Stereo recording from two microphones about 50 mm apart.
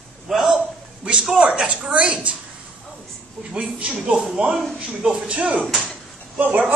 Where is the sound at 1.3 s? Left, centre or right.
Centre.